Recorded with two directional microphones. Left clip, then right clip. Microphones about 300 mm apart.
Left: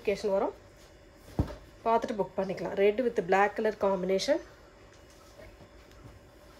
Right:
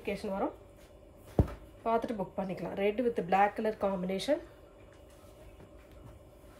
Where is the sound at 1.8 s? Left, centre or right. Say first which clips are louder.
Left 4 dB; left.